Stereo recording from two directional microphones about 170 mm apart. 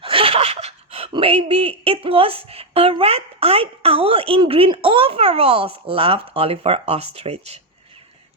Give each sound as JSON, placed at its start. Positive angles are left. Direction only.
{"t": 0.0, "sound": "speech", "side_deg": -30}